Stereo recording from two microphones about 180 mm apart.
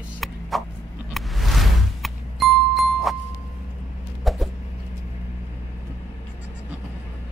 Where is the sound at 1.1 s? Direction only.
Centre (ahead or behind).